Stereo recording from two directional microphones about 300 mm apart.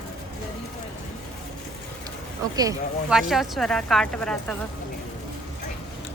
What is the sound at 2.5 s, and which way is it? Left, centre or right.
Speech, centre.